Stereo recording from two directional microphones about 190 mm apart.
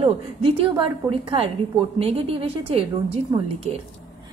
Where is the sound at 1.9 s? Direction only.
30° right (ahead or behind).